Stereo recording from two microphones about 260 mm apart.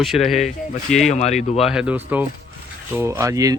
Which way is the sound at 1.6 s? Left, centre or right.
Centre.